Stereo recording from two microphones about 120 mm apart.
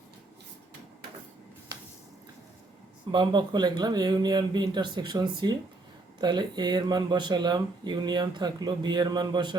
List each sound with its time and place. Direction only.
3.1 s speech: 40° right (ahead or behind)